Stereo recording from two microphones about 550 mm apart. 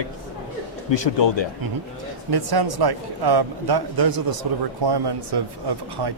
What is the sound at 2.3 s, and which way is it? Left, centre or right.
A man's voice, right.